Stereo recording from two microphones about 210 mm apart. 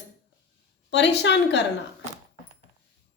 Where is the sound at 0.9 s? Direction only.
55° left (ahead or behind).